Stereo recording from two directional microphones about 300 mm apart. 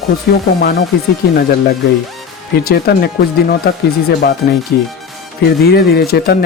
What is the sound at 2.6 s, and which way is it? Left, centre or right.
Speech, left.